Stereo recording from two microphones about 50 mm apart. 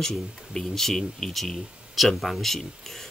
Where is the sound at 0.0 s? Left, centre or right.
Centre.